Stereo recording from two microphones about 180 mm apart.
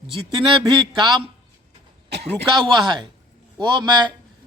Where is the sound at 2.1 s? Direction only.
70° right (ahead or behind).